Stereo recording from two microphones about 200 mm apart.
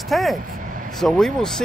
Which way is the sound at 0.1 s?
Centre (ahead or behind).